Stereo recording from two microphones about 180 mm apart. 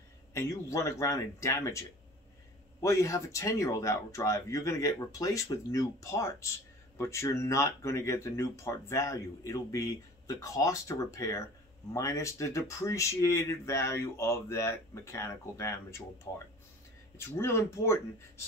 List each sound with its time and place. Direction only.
0.3 s speech: 15° left (ahead or behind)
17.2 s speech: 15° left (ahead or behind)